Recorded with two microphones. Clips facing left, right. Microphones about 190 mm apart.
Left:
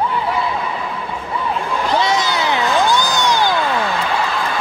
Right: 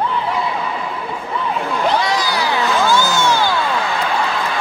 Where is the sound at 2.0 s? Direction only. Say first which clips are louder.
Left 1 dB; 20° left (ahead or behind).